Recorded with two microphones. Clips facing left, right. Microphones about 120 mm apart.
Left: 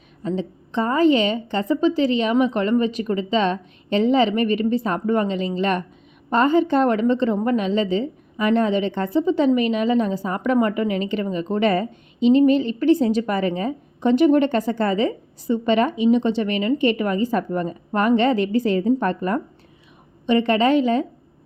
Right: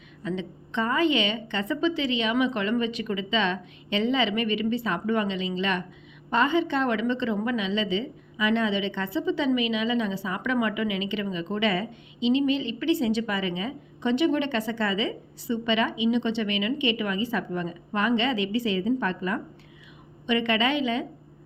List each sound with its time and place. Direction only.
0.2 s a woman's voice: 35° left (ahead or behind)
20.2 s a woman's voice: 35° left (ahead or behind)